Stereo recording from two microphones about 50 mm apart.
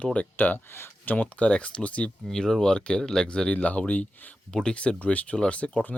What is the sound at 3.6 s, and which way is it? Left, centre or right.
Speech, left.